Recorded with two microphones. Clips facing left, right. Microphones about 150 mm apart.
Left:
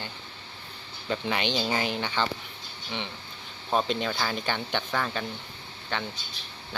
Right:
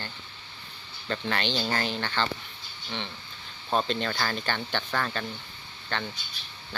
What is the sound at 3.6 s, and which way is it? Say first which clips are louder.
Speech: left 1 dB; 5° left (ahead or behind).